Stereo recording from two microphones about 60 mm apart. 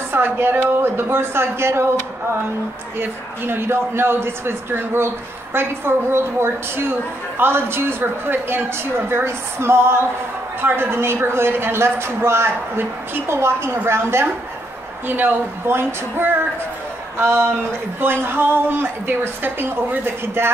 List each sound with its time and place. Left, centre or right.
0.1 s speech: right
3.0 s a woman's voice: right
15.0 s a woman's voice: right